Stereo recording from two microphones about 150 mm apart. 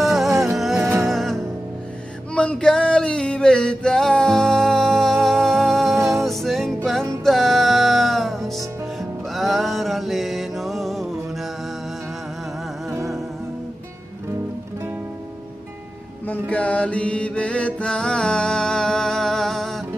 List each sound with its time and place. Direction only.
0.0 s music: centre (ahead or behind)
12.9 s music: 20° right (ahead or behind)
16.3 s mantra: 10° left (ahead or behind)